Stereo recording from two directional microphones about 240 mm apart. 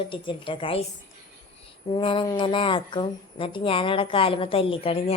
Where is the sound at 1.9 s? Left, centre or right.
Left.